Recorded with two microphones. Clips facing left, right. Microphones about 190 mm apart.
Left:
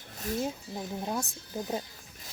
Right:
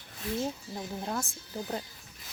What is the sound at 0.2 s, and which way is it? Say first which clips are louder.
Speech: left 1 dB; 45° left (ahead or behind).